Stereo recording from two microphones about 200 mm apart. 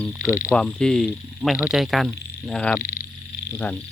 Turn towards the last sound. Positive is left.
turn(degrees=10)  # may be behind; listen again after turning